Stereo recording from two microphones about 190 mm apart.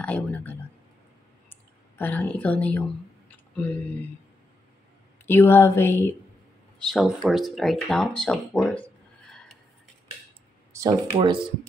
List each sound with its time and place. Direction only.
0.0 s speech: 5° left (ahead or behind)
1.5 s clicking: 10° left (ahead or behind)
3.3 s a sound: 10° left (ahead or behind)
5.2 s speech: 10° left (ahead or behind)
6.8 s speech: centre (ahead or behind)
10.7 s speech: 15° right (ahead or behind)